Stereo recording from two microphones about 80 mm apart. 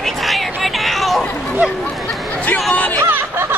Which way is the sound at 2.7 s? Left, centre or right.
Centre.